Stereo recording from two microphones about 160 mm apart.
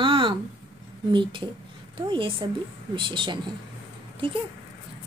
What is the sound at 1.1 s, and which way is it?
Speech, 30° right (ahead or behind).